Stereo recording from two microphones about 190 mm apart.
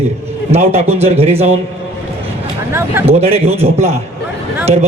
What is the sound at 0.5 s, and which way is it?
A man's voice, 35° right (ahead or behind).